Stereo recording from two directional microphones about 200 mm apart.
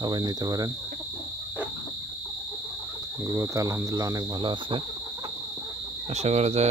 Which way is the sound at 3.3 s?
15° right (ahead or behind).